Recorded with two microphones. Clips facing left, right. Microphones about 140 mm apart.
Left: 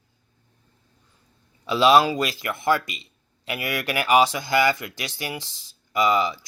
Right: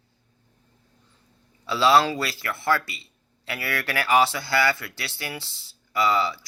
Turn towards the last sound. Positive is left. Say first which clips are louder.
# left 2 dB
turn(degrees=15)  # may be behind; listen again after turning